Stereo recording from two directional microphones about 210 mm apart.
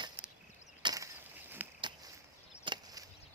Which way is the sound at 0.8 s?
15° right (ahead or behind).